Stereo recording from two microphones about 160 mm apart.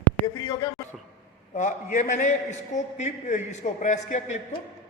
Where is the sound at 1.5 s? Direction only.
50° left (ahead or behind).